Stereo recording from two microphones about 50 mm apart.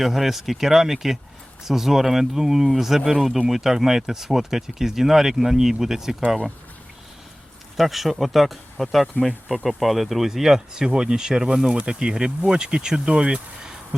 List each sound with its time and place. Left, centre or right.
0.0 s speech: centre
7.8 s speech: centre